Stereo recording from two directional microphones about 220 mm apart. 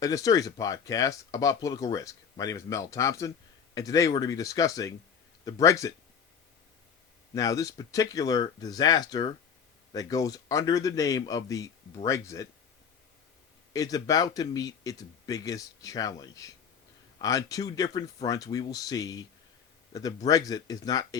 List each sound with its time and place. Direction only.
0.0 s speech: 15° left (ahead or behind)
7.3 s speech: 15° left (ahead or behind)
13.7 s speech: 15° left (ahead or behind)